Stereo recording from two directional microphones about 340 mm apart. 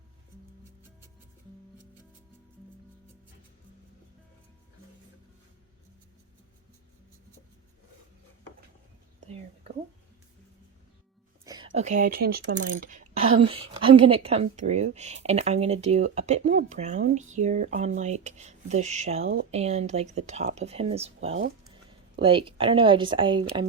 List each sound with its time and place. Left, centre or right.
11.4 s speech: centre